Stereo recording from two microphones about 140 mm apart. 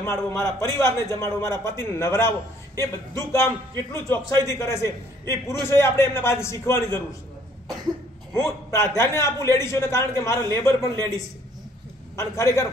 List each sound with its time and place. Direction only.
0.0 s a man's voice: 20° left (ahead or behind)
8.4 s a man's voice: 20° left (ahead or behind)
12.2 s a man's voice: 20° left (ahead or behind)